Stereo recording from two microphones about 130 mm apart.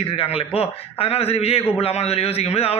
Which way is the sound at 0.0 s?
45° left (ahead or behind).